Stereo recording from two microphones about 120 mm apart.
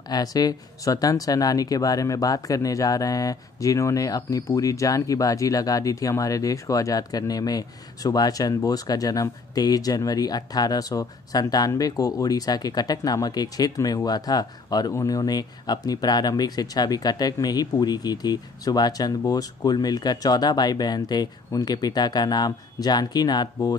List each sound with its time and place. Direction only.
0.1 s speech: 30° left (ahead or behind)